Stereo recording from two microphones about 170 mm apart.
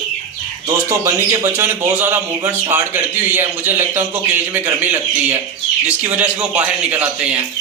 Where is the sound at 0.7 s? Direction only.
15° right (ahead or behind).